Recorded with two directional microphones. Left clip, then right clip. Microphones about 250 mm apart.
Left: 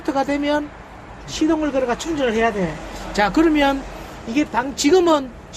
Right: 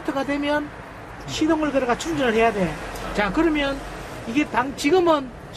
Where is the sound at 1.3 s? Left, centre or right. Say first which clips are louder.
Left 2 dB; centre.